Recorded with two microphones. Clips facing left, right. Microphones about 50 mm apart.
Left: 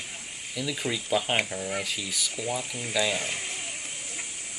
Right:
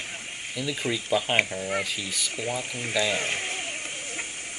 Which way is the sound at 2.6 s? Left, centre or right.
Right.